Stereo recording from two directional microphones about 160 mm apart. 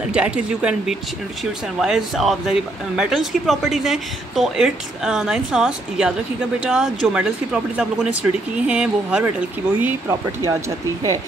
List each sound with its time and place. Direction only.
0.1 s speech: 5° right (ahead or behind)